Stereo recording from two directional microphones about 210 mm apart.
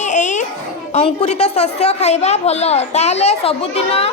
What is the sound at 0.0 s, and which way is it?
Children playing, 35° left (ahead or behind).